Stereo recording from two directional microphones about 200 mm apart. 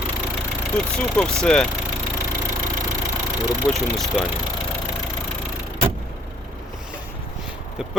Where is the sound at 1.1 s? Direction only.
5° left (ahead or behind).